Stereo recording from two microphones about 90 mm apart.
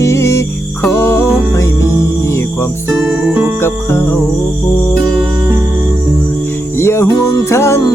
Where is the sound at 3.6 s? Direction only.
25° left (ahead or behind).